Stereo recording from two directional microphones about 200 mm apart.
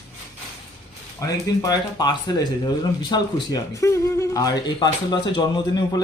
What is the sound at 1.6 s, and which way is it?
Speech, 20° left (ahead or behind).